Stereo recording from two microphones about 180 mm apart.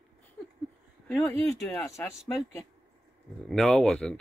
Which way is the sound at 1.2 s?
5° left (ahead or behind).